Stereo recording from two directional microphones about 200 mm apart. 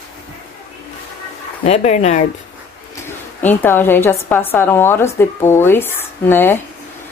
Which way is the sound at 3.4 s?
10° left (ahead or behind).